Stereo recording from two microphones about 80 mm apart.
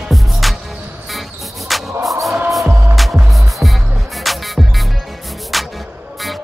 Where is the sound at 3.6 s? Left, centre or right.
Right.